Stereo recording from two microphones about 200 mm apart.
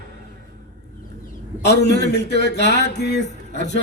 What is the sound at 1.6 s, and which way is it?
A man's voice, 55° left (ahead or behind).